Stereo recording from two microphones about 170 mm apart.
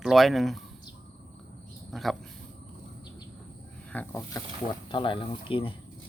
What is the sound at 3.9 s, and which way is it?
Speech, 10° left (ahead or behind).